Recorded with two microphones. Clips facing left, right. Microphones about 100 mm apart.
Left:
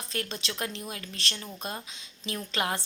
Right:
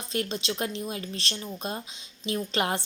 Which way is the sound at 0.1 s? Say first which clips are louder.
Right 6 dB; 20° right (ahead or behind).